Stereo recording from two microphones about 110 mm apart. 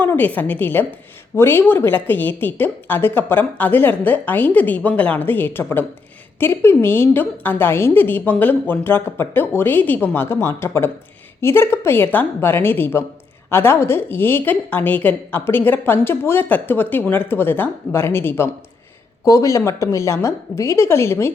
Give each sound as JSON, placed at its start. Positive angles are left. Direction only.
{"t": 0.0, "sound": "a woman's voice", "side_deg": 15}